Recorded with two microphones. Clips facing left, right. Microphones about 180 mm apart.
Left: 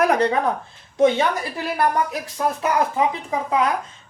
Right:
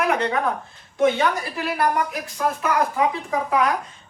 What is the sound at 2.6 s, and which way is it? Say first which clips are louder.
Speech: left 1 dB; 20° left (ahead or behind).